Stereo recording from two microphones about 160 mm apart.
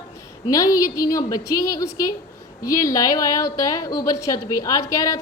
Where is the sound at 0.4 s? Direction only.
20° left (ahead or behind).